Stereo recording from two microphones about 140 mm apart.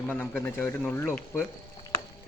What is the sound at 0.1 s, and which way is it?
Speech, 15° left (ahead or behind).